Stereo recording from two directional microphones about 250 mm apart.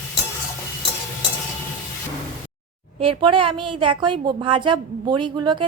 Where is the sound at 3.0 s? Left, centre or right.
Right.